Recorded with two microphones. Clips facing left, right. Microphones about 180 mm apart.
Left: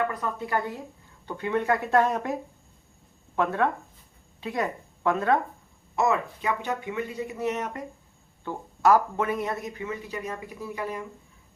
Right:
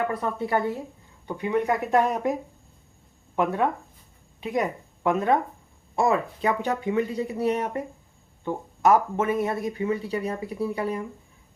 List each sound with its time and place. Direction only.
0.1 s speech: 30° right (ahead or behind)
1.3 s speech: 10° right (ahead or behind)
3.3 s speech: 15° right (ahead or behind)
6.0 s speech: 35° right (ahead or behind)
8.4 s speech: 20° right (ahead or behind)